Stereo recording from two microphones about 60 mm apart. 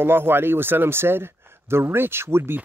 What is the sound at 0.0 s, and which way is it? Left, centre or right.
Speech, right.